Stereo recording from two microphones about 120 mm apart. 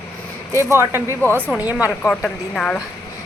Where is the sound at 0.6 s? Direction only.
20° right (ahead or behind).